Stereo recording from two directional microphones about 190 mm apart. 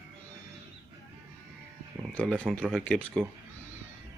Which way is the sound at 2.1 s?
5° left (ahead or behind).